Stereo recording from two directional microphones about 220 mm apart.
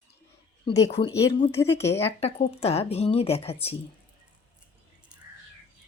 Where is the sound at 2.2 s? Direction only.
30° left (ahead or behind).